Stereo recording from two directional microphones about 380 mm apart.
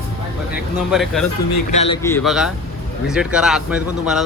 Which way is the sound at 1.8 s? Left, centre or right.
Centre.